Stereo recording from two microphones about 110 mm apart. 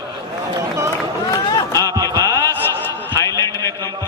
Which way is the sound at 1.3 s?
35° left (ahead or behind).